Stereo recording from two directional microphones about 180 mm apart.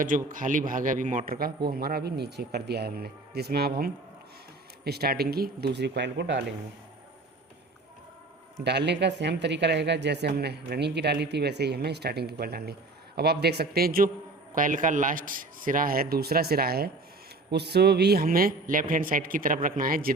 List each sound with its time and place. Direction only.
0.0 s a man's voice: 50° right (ahead or behind); by 6.4 s 80° right
8.6 s a woman's voice: 70° right (ahead or behind); by 20.1 s 55° right (ahead or behind)